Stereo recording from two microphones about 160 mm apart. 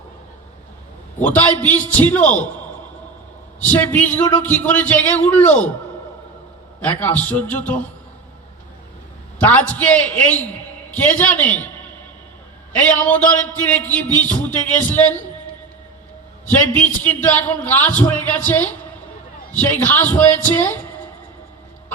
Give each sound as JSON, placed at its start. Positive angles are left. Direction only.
{"t": 1.2, "sound": "a man's voice", "side_deg": 10}
{"t": 3.6, "sound": "a man's voice", "side_deg": 10}
{"t": 6.8, "sound": "a man's voice", "side_deg": 10}
{"t": 9.4, "sound": "a man's voice", "side_deg": 10}
{"t": 13.1, "sound": "a man's voice", "side_deg": 10}
{"t": 17.0, "sound": "a man's voice", "side_deg": 10}
{"t": 19.8, "sound": "a man's voice", "side_deg": 10}